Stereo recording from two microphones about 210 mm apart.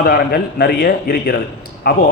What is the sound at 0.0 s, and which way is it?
A man's voice, 45° left (ahead or behind).